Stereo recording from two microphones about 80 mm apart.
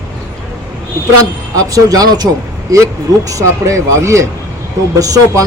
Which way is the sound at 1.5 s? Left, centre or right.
Right.